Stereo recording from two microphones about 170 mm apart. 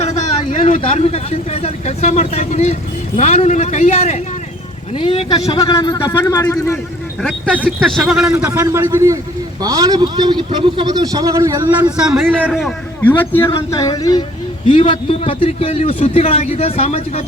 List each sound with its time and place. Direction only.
0.8 s a man's voice: 35° left (ahead or behind)
5.7 s a man's voice: 20° left (ahead or behind)
7.2 s speech: 5° left (ahead or behind)
8.3 s a man's voice: 15° right (ahead or behind)
11.9 s speech: 5° right (ahead or behind)
13.0 s a man's voice: 10° left (ahead or behind)
13.7 s speech: 20° left (ahead or behind)
14.7 s a man's voice: 35° left (ahead or behind)